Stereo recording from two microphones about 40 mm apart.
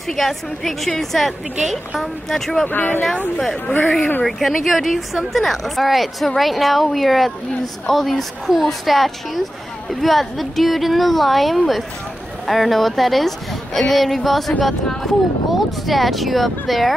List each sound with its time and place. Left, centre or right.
0.1 s a woman's voice: centre
2.7 s speech: left
4.2 s a woman's voice: centre